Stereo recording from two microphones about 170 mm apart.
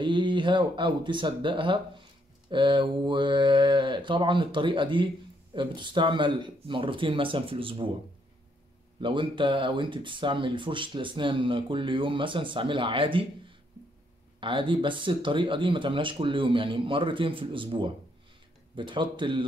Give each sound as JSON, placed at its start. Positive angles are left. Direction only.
{"t": 0.0, "sound": "speech", "side_deg": -30}
{"t": 9.0, "sound": "speech", "side_deg": -30}